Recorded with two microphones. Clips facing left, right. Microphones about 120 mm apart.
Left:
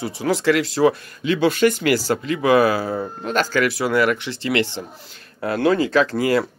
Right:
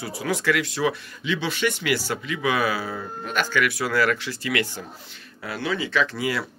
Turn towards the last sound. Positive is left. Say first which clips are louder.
# left 7 dB
turn(degrees=45)  # may be behind; listen again after turning